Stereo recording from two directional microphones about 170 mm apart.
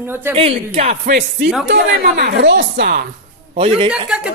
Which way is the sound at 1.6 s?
65° right (ahead or behind).